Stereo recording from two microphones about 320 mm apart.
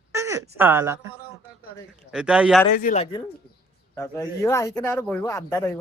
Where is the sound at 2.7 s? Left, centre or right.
Left.